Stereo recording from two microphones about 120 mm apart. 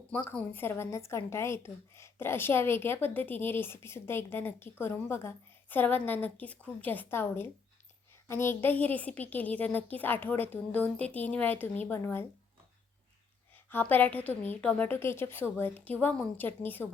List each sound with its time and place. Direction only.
0.1 s a woman's voice: 10° left (ahead or behind)
13.7 s a woman's voice: 15° left (ahead or behind)